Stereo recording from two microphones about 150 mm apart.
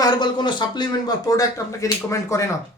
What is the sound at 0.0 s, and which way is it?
Speech, 30° left (ahead or behind).